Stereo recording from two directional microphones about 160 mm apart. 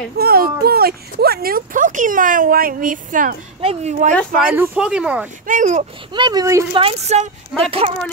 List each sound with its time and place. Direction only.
0.2 s speech: 70° right (ahead or behind)
3.6 s speech: 45° right (ahead or behind)
4.5 s speech: 10° right (ahead or behind)
5.5 s speech: 50° right (ahead or behind)
6.1 s speech: 25° right (ahead or behind)
6.7 s speech: 35° right (ahead or behind)